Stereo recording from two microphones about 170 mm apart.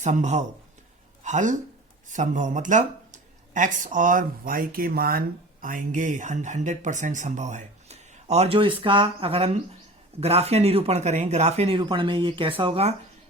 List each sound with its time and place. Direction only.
0.0 s speech: 45° right (ahead or behind)
8.5 s speech: 30° right (ahead or behind)